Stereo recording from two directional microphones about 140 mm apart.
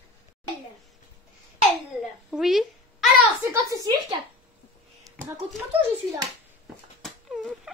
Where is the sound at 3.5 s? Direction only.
25° right (ahead or behind).